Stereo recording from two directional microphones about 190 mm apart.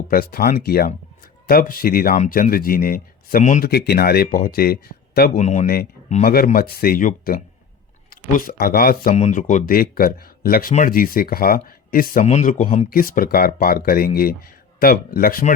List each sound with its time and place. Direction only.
0.1 s speech: 50° left (ahead or behind)
3.7 s speech: 55° left (ahead or behind)
5.4 s speech: 40° left (ahead or behind)
9.1 s speech: 40° left (ahead or behind)
12.2 s speech: 35° left (ahead or behind)
12.9 s speech: 50° left (ahead or behind)